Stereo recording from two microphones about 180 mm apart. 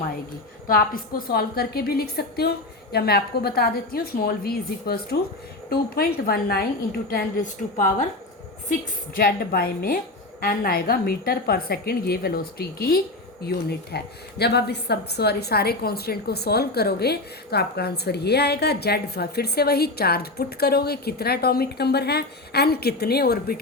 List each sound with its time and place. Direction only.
1.3 s a woman's voice: 60° left (ahead or behind)
7.1 s a woman's voice: 45° left (ahead or behind)
9.1 s a woman's voice: 55° left (ahead or behind)